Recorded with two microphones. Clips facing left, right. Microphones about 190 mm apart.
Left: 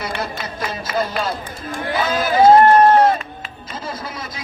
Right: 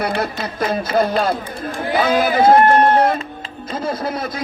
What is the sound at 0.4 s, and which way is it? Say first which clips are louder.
Speech: right 6 dB; 55° right (ahead or behind).